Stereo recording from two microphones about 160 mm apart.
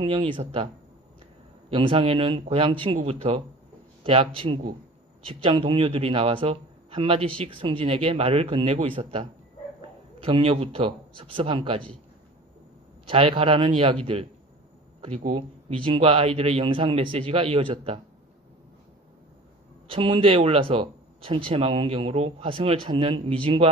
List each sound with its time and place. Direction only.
0.0 s speech: 30° right (ahead or behind)
1.7 s speech: 30° right (ahead or behind)
13.0 s speech: 35° right (ahead or behind)
15.0 s speech: 45° right (ahead or behind)
15.3 s speech: 35° right (ahead or behind)
19.9 s speech: 35° right (ahead or behind)